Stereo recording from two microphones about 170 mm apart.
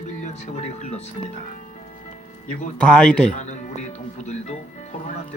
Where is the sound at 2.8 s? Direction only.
5° left (ahead or behind).